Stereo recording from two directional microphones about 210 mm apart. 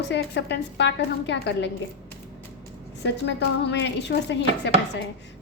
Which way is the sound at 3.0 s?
55° left (ahead or behind).